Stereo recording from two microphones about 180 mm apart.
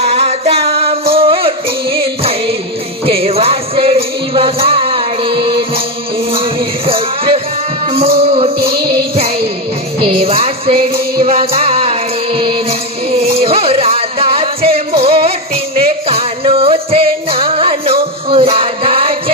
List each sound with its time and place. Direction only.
0.0 s music: 35° right (ahead or behind)